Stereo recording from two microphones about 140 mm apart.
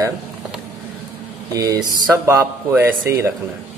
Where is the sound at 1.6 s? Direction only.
25° right (ahead or behind).